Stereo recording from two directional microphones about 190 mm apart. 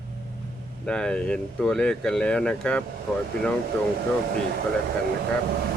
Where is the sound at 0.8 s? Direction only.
5° left (ahead or behind).